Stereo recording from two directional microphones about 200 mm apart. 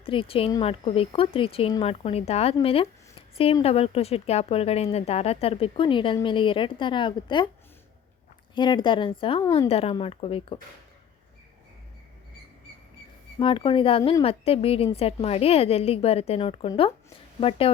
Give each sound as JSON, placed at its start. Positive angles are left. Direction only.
{"t": 0.0, "sound": "speech", "side_deg": 25}
{"t": 8.5, "sound": "speech", "side_deg": 25}
{"t": 13.4, "sound": "speech", "side_deg": 25}